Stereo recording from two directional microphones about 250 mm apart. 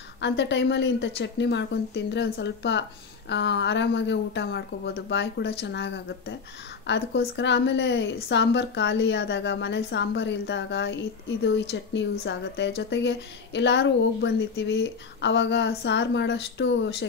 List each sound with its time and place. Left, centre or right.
0.2 s speech: left